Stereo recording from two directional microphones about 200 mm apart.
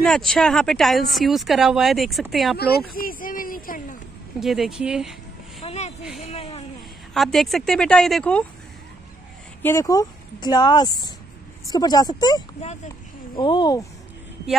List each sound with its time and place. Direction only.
0.0 s speech: 5° left (ahead or behind)
2.6 s a sound: 50° left (ahead or behind)
4.4 s speech: centre (ahead or behind)
5.6 s a sound: 30° left (ahead or behind)
7.2 s speech: centre (ahead or behind)
9.6 s speech: 15° left (ahead or behind)